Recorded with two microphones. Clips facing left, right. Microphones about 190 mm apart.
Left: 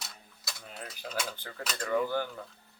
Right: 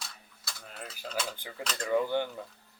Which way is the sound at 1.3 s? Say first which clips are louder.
Right 1 dB; 10° right (ahead or behind).